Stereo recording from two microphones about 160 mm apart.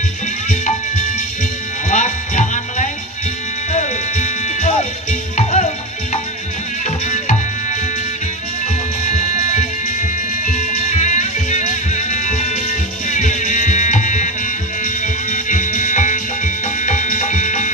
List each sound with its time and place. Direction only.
1.9 s music: 50° left (ahead or behind)
9.0 s music: 50° left (ahead or behind)